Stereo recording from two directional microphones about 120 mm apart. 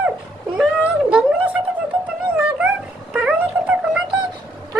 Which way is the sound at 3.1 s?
10° right (ahead or behind).